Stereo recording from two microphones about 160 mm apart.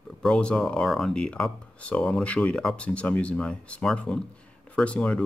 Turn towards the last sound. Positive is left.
turn(degrees=5)  # may be behind; listen again after turning